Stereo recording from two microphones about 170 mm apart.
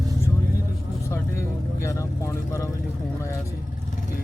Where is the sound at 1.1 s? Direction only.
15° left (ahead or behind).